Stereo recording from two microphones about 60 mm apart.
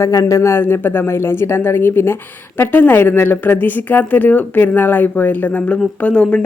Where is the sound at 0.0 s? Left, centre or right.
Left.